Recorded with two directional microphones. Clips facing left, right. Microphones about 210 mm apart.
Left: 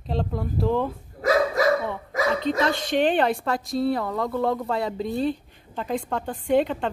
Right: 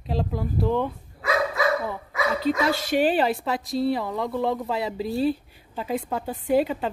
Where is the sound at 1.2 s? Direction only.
40° left (ahead or behind).